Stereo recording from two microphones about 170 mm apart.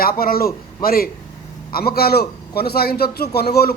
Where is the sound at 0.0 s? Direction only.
60° left (ahead or behind).